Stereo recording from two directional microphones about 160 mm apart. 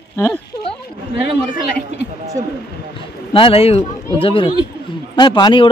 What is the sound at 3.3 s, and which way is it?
Speech, 35° left (ahead or behind).